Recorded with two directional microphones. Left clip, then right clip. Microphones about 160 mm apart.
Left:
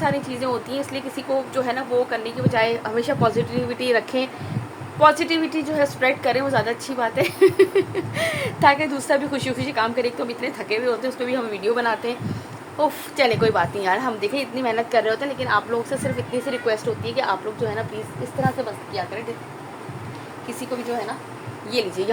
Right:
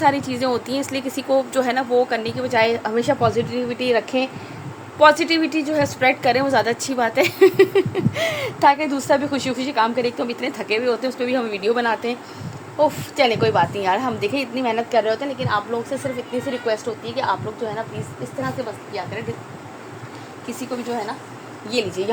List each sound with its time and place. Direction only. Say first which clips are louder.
0.0 s speech: right 5 dB; 70° right (ahead or behind); by 4.3 s 30° right (ahead or behind)
4.9 s a woman's voice: right 2 dB; 55° right (ahead or behind)
12.8 s a woman's voice: right 2 dB; 30° right (ahead or behind); by 17.3 s 15° right (ahead or behind)
21.7 s a woman's voice: right 1 dB; 40° right (ahead or behind)